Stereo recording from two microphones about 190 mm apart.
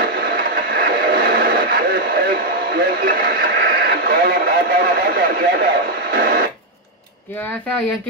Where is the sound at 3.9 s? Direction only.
55° right (ahead or behind).